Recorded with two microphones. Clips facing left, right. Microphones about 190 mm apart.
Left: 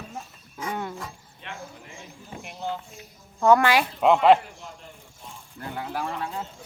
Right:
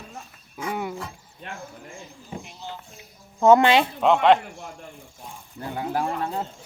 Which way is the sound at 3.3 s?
20° right (ahead or behind).